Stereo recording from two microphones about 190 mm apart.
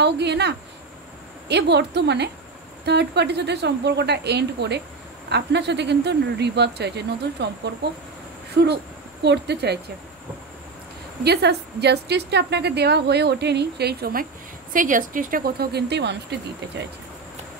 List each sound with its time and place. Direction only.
0.0 s a woman's voice: 65° right (ahead or behind)
9.2 s a woman's voice: 65° right (ahead or behind)
11.2 s a woman's voice: 60° right (ahead or behind)
14.7 s speech: 45° right (ahead or behind); by 16.8 s 65° right (ahead or behind)